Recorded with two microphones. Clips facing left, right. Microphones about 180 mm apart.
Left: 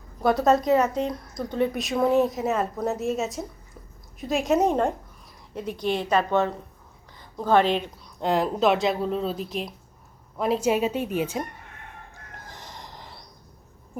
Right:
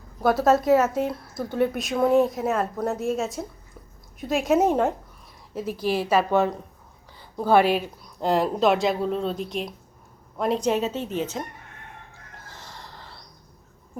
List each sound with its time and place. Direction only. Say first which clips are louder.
0.2 s a woman's voice: right 1 dB; centre (ahead or behind)
12.5 s snort: even; 15° left (ahead or behind)